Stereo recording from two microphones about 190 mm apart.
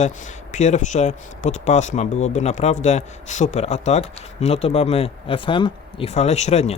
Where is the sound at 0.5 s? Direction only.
40° left (ahead or behind).